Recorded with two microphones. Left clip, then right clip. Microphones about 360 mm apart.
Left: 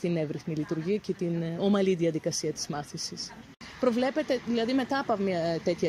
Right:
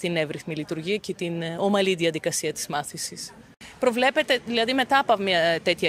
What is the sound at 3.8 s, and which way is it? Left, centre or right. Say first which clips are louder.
Speech: right 6 dB; right.